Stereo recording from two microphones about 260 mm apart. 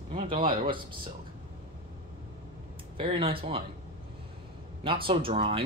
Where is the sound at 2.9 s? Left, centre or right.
Centre.